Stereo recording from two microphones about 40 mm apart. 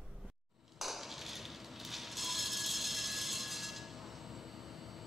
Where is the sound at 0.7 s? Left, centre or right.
Centre.